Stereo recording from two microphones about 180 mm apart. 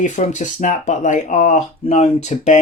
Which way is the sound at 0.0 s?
45° left (ahead or behind).